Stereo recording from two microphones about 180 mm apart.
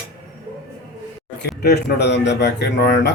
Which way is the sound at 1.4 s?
65° left (ahead or behind).